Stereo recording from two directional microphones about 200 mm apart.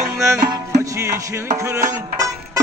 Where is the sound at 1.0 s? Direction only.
15° right (ahead or behind).